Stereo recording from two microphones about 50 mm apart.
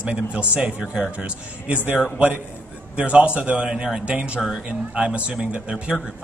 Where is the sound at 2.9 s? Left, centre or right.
Right.